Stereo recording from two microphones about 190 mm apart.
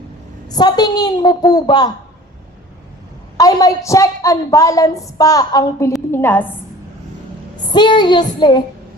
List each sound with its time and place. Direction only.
0.4 s a woman's voice: 20° left (ahead or behind)
3.3 s a woman's voice: 20° left (ahead or behind)
7.7 s a woman's voice: 25° left (ahead or behind)